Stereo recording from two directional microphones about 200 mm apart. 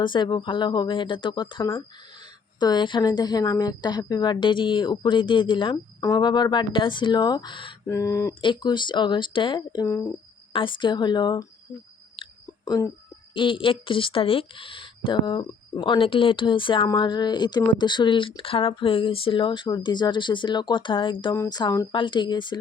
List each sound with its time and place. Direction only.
0.0 s speech: 25° left (ahead or behind)
10.5 s speech: 25° left (ahead or behind)
12.1 s a sound: 20° left (ahead or behind)
13.3 s speech: 25° left (ahead or behind)